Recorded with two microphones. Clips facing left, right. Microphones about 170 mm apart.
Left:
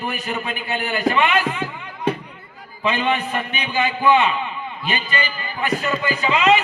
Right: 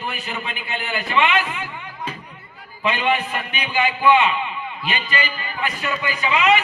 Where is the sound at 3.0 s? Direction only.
10° right (ahead or behind).